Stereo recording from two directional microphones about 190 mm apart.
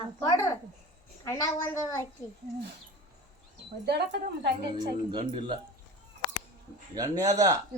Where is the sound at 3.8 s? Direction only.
60° right (ahead or behind).